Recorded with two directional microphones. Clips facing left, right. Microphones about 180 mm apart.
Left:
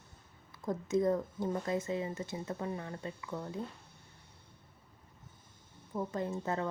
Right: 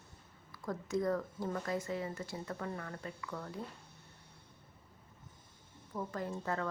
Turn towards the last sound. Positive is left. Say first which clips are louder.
# left 3 dB
turn(degrees=20)  # may be behind; listen again after turning